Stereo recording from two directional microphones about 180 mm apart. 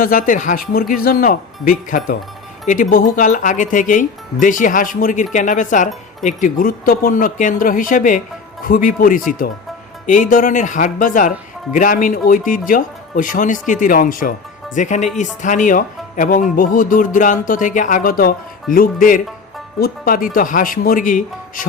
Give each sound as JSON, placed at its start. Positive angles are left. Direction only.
{"t": 0.0, "sound": "a man's voice", "side_deg": 50}
{"t": 2.6, "sound": "a man's voice", "side_deg": 45}